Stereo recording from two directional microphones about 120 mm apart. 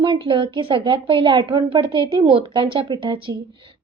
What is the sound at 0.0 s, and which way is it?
A woman's voice, 40° right (ahead or behind).